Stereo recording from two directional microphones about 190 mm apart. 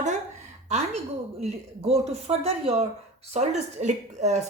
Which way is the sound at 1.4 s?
35° right (ahead or behind).